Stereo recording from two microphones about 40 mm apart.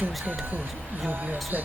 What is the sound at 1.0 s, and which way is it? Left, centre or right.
Speech, right.